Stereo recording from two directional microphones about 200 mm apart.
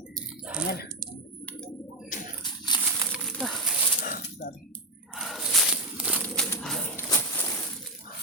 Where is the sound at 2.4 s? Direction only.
20° left (ahead or behind).